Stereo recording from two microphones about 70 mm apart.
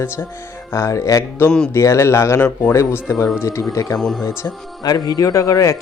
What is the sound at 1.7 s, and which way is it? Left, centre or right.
Speech, left.